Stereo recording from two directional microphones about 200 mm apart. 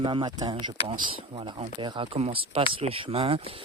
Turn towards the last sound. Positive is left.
turn(degrees=-30)  # may be behind; listen again after turning